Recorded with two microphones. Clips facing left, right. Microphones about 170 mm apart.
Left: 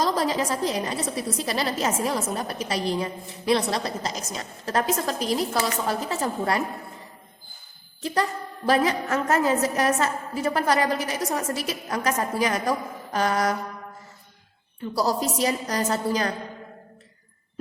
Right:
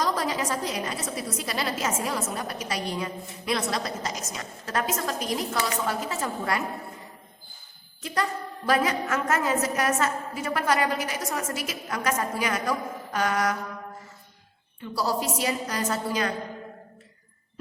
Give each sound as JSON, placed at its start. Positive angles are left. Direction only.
{"t": 0.0, "sound": "a woman's voice", "side_deg": 30}
{"t": 8.0, "sound": "a woman's voice", "side_deg": 30}
{"t": 14.9, "sound": "a woman's voice", "side_deg": 40}